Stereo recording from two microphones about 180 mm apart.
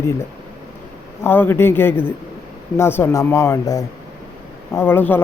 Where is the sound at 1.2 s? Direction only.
10° left (ahead or behind).